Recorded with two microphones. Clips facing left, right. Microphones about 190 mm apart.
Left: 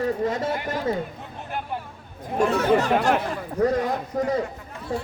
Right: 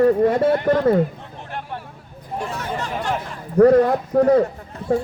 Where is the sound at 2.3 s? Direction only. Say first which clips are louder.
Left 7 dB; 65° left (ahead or behind).